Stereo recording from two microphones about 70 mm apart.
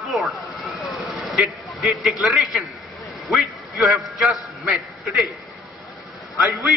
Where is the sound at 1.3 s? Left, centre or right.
Centre.